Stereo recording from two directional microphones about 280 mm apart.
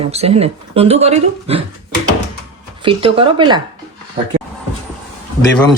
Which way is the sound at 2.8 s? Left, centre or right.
Centre.